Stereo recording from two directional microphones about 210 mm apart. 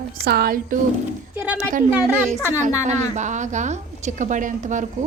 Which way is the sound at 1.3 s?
5° right (ahead or behind).